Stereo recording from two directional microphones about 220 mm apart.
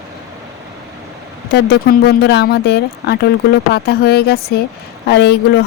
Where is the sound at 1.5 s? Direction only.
50° left (ahead or behind).